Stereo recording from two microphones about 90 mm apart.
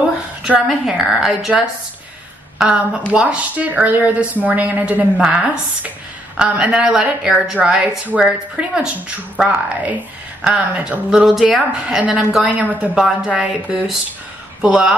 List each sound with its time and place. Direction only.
0.4 s a woman's voice: 5° right (ahead or behind)
2.6 s speech: 10° right (ahead or behind)